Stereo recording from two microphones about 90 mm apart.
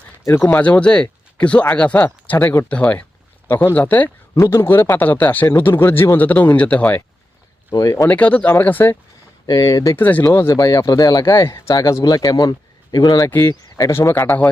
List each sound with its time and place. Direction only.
0.3 s speech: 35° left (ahead or behind)
0.5 s speech: 15° left (ahead or behind)
7.7 s speech: 40° left (ahead or behind)
8.0 s speech: 15° left (ahead or behind)
9.5 s speech: 40° left (ahead or behind)
9.9 s speech: 20° left (ahead or behind)
10.2 s speech: 35° left (ahead or behind)
11.4 s speech: 30° left (ahead or behind)
11.7 s speech: 45° left (ahead or behind)
13.5 s speech: 40° left (ahead or behind)